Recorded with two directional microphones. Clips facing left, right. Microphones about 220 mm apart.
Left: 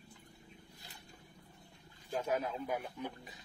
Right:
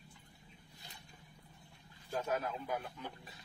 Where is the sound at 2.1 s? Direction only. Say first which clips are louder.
Left 2 dB; 15° left (ahead or behind).